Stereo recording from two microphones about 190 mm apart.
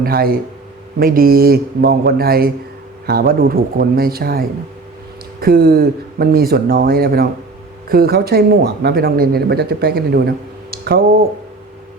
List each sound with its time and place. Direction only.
0.0 s speech: 50° right (ahead or behind)